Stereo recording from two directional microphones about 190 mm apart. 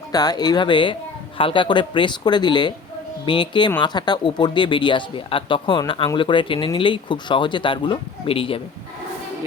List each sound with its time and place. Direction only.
0.1 s speech: 20° left (ahead or behind)